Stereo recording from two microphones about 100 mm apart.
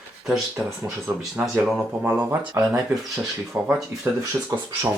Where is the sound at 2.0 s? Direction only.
15° right (ahead or behind).